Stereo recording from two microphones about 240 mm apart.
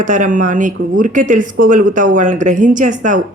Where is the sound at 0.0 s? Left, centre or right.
Right.